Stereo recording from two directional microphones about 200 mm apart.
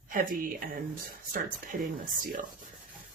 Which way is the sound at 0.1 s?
45° right (ahead or behind).